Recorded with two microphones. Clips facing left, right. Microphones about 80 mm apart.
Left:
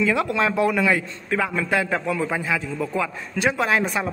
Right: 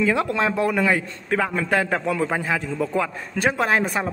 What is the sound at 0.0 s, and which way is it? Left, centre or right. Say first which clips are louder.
A man's voice: even; right.